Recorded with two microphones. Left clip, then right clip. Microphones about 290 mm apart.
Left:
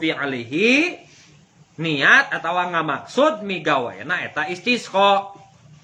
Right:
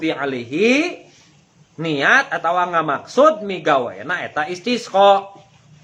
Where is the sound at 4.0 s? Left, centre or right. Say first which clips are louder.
Right 1 dB; centre.